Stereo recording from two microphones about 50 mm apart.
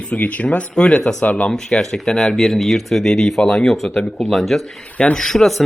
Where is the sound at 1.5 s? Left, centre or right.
Centre.